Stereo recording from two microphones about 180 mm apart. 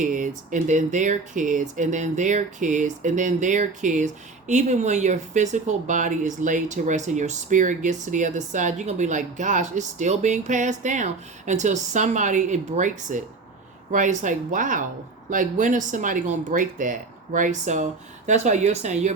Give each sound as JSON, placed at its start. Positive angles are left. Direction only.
{"t": 0.0, "sound": "speech", "side_deg": -45}